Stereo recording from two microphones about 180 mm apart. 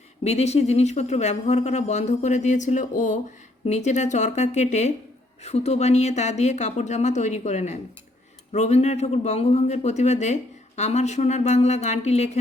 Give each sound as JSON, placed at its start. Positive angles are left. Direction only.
{"t": 0.3, "sound": "a man's voice", "side_deg": 35}